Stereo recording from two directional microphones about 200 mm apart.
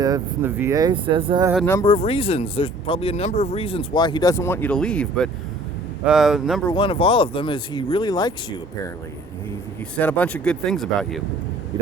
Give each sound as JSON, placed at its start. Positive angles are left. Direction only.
{"t": 0.0, "sound": "speech", "side_deg": -15}
{"t": 1.6, "sound": "speech", "side_deg": 15}
{"t": 1.9, "sound": "speech", "side_deg": 30}
{"t": 6.7, "sound": "speech", "side_deg": 25}
{"t": 9.9, "sound": "speech", "side_deg": 5}